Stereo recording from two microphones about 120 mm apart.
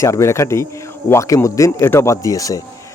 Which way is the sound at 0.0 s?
25° left (ahead or behind).